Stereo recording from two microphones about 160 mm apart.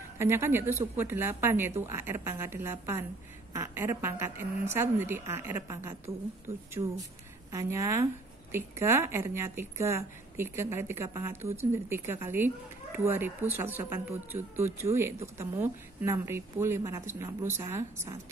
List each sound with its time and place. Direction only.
0.2 s a woman's voice: 15° right (ahead or behind)